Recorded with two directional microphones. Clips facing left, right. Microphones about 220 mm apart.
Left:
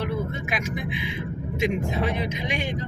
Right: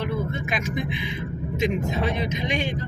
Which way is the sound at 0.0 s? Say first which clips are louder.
Right 1 dB; 10° left (ahead or behind).